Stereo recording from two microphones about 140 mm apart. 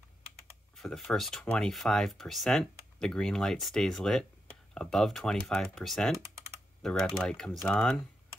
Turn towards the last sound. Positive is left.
turn(degrees=5)  # may be behind; listen again after turning